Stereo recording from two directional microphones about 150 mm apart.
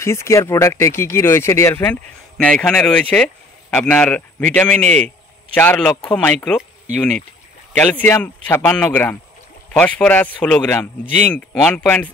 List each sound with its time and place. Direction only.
0.0 s speech: 20° left (ahead or behind)